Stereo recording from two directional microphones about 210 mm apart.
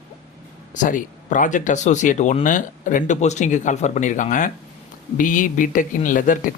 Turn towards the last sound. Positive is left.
turn(degrees=40)  # may be behind; listen again after turning